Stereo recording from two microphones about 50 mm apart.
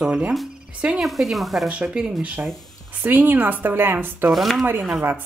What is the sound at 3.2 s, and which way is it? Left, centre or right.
A woman's voice, right.